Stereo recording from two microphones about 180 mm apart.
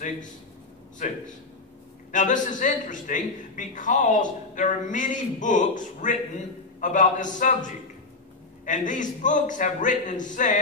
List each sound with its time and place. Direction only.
1.0 s a man's voice: 45° left (ahead or behind)